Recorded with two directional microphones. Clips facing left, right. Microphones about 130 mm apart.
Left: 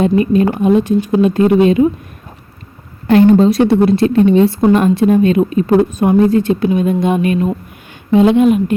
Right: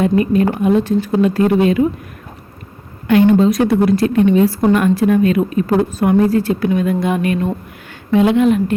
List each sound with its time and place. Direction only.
0.0 s a woman's voice: 25° left (ahead or behind)
3.1 s a woman's voice: 35° left (ahead or behind); by 8.7 s 20° left (ahead or behind)